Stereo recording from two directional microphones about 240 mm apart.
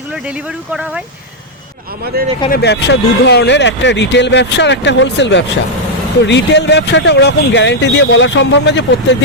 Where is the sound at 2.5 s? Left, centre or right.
Left.